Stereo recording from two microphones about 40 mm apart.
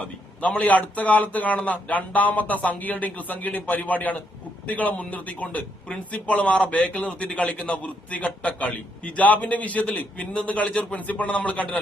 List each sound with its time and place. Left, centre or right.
0.4 s speech: left